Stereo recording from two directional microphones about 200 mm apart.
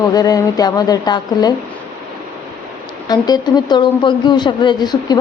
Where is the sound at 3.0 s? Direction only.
20° left (ahead or behind).